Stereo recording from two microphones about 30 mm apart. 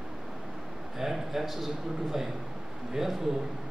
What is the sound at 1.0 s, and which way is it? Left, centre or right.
Speech, centre.